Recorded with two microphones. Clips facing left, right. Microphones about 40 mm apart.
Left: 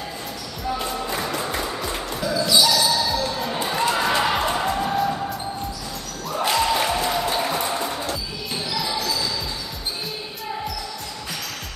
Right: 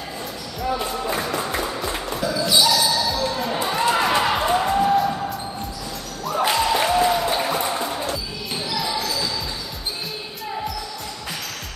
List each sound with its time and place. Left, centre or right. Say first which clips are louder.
0.7 s music: right 2 dB; centre
2.6 s basketball bounce: even; centre
6.3 s music: right 1 dB; centre
8.6 s basketball bounce: right 1 dB; centre